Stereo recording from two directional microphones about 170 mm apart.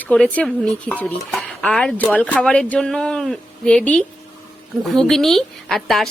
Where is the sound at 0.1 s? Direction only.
5° left (ahead or behind).